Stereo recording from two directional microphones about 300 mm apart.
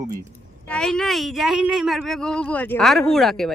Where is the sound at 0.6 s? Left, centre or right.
Centre.